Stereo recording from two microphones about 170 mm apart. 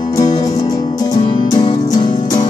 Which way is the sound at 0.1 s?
20° left (ahead or behind).